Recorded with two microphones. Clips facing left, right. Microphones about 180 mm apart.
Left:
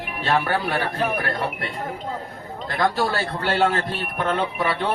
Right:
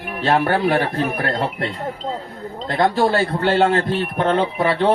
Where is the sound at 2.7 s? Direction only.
25° right (ahead or behind).